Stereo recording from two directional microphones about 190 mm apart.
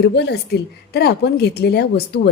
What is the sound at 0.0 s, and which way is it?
A woman's voice, 60° left (ahead or behind).